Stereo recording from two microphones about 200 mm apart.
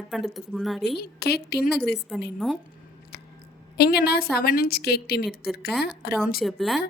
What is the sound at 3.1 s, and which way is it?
Chewing, 55° left (ahead or behind).